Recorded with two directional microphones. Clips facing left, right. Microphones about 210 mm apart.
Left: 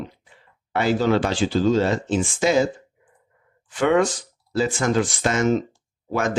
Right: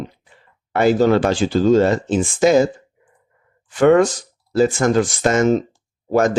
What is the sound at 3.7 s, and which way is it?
Speech, 45° right (ahead or behind).